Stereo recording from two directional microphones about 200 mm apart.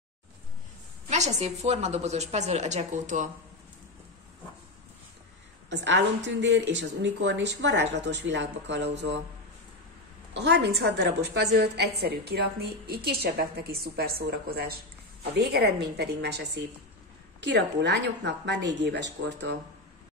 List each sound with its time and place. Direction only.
1.1 s a woman's voice: 35° right (ahead or behind)
5.7 s a woman's voice: 60° right (ahead or behind)
10.3 s a woman's voice: 60° right (ahead or behind)